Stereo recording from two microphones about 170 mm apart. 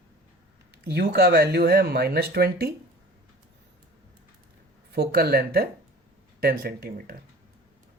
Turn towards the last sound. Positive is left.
turn(degrees=-60)  # may be behind; listen again after turning